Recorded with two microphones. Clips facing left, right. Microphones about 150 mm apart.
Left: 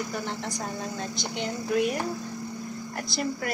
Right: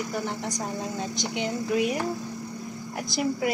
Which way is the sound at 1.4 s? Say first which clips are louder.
Even; centre (ahead or behind).